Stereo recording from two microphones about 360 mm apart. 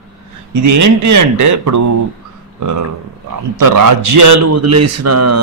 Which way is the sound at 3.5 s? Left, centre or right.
Right.